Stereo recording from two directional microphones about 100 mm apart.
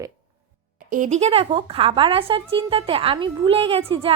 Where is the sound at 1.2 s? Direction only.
70° right (ahead or behind).